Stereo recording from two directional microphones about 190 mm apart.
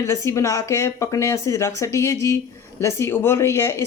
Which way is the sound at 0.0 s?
15° left (ahead or behind).